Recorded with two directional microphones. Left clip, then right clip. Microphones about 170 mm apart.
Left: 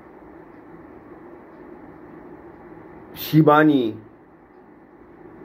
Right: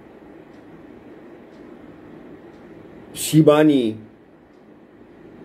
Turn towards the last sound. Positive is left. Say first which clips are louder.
# right 1 dB
turn(degrees=-15)  # may be behind; listen again after turning